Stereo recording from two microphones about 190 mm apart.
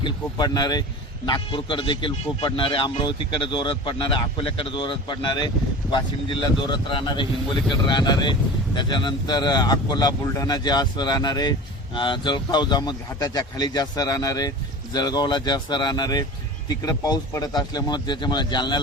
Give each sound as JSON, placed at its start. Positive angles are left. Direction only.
{"t": 0.0, "sound": "a man's voice", "side_deg": 20}